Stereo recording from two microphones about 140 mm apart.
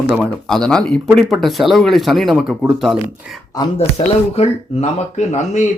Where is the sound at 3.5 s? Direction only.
30° left (ahead or behind).